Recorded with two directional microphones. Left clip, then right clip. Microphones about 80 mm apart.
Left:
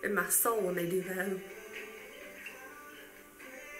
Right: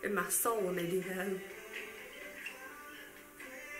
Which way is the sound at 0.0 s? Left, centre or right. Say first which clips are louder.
Left 3 dB; centre.